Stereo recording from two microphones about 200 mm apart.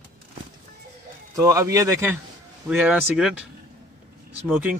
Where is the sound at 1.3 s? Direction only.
15° right (ahead or behind).